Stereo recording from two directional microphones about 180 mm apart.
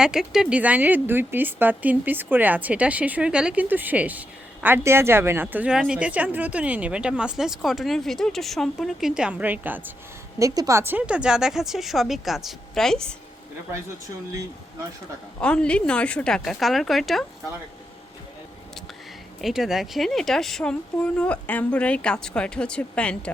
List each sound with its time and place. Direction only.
0.0 s speech: 5° right (ahead or behind)
15.4 s speech: 5° left (ahead or behind)
19.4 s speech: centre (ahead or behind)